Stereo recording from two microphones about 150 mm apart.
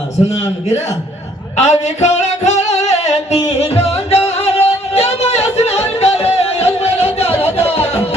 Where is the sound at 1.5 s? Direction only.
50° left (ahead or behind).